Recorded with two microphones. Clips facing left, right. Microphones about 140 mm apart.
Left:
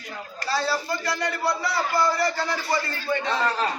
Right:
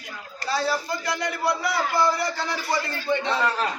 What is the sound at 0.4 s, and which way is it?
A man's voice, 15° right (ahead or behind).